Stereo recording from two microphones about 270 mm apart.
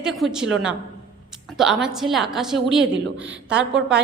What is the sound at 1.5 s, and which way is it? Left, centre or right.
A woman's voice, centre.